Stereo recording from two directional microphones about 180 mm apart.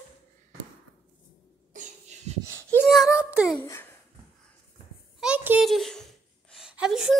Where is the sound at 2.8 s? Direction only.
Centre (ahead or behind).